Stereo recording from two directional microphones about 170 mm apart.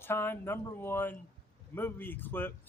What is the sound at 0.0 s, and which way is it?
Speech, 15° left (ahead or behind).